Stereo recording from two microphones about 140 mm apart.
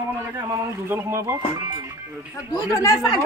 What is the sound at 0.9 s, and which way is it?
Speech, 20° right (ahead or behind).